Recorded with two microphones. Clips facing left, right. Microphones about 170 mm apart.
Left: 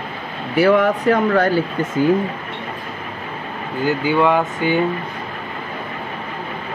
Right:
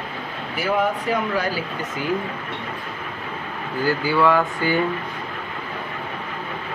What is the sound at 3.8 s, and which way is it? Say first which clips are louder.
Speech: left 2 dB; 20° left (ahead or behind).